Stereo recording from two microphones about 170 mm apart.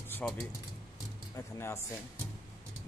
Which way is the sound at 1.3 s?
15° left (ahead or behind).